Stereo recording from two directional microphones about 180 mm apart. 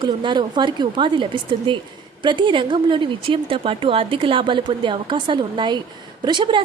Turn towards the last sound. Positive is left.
turn(degrees=-25)  # may be behind; listen again after turning